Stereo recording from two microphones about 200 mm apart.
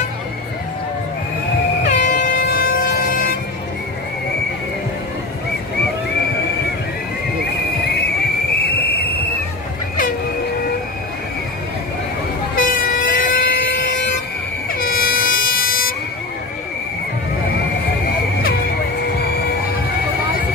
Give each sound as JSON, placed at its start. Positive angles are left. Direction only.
{"t": 1.9, "sound": "air horn", "side_deg": 40}
{"t": 12.5, "sound": "vehicle", "side_deg": 45}
{"t": 14.7, "sound": "air horn", "side_deg": 45}